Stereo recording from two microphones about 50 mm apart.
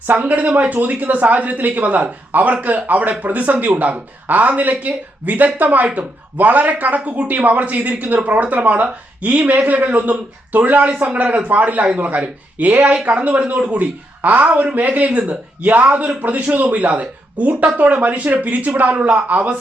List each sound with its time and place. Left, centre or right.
0.1 s speech: right